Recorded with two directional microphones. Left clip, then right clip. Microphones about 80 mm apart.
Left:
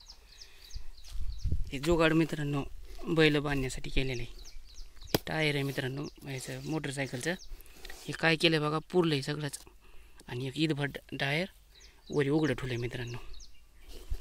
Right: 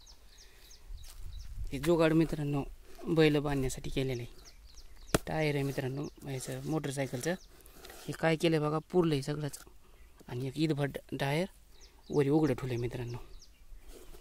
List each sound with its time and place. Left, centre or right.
1.7 s speech: centre
2.4 s a sound: centre
3.2 s speech: centre
3.6 s speech: right
5.2 s speech: centre
6.2 s speech: right
7.9 s a sound: centre
8.2 s speech: centre
10.8 s speech: right
12.4 s speech: centre